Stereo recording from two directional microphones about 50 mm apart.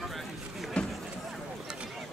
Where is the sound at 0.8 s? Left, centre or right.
Centre.